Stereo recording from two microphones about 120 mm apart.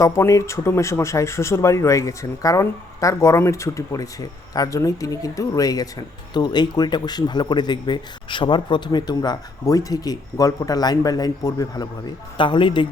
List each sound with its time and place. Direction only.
0.0 s speech: 25° left (ahead or behind)
12.4 s speech: 40° left (ahead or behind)